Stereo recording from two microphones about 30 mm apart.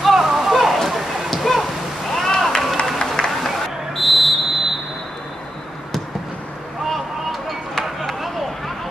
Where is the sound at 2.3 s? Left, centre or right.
Left.